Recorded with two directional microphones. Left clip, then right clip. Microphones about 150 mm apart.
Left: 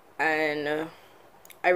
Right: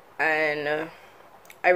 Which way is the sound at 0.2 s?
15° left (ahead or behind).